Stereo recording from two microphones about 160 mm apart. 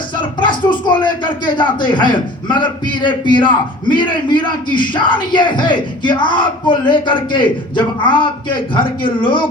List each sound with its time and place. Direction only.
0.2 s a man's voice: 30° left (ahead or behind)